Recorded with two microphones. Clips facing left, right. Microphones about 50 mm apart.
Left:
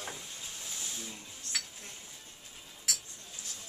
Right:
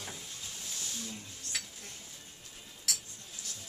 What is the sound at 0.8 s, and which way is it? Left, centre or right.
Wild animals, centre.